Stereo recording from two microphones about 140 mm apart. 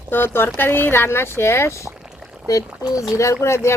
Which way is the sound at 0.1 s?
15° left (ahead or behind).